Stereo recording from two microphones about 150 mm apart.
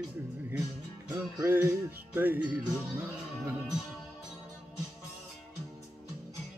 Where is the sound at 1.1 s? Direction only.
20° right (ahead or behind).